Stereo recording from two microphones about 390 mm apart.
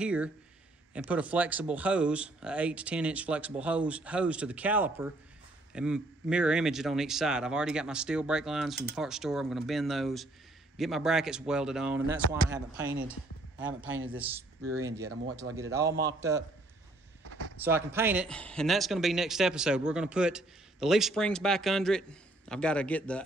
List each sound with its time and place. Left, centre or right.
0.0 s speech: centre
15.0 s speech: right
15.5 s speech: centre
17.6 s speech: centre